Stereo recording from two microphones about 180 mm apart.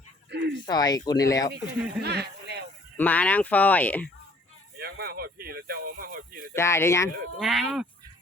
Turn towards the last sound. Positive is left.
turn(degrees=0)  # may be behind; listen again after turning